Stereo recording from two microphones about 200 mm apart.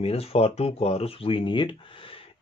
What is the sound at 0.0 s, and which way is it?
Speech, 30° left (ahead or behind).